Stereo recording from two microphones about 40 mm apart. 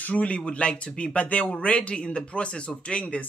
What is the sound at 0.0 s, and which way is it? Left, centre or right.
Speech, left.